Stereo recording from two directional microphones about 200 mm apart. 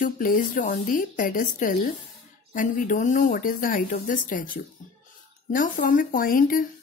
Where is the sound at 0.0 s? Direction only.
40° left (ahead or behind).